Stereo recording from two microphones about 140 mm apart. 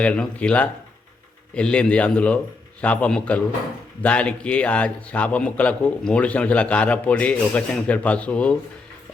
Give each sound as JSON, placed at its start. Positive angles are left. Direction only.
{"t": 0.0, "sound": "a man's voice", "side_deg": 10}